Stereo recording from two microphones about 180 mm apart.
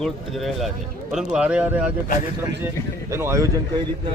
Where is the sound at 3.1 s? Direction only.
15° right (ahead or behind).